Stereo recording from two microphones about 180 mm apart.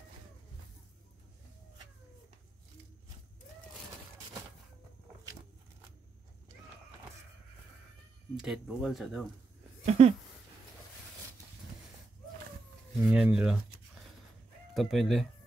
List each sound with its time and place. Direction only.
8.4 s speech: centre (ahead or behind)
9.8 s a sound: 35° right (ahead or behind)
13.0 s speech: 5° right (ahead or behind)
14.7 s speech: centre (ahead or behind)